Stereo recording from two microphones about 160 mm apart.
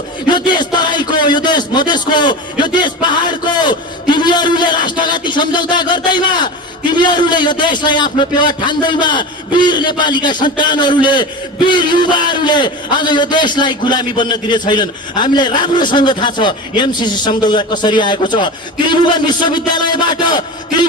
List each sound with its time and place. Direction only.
0.3 s a man's voice: 25° left (ahead or behind)